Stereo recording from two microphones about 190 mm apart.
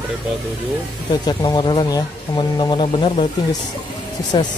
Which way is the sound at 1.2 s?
20° left (ahead or behind).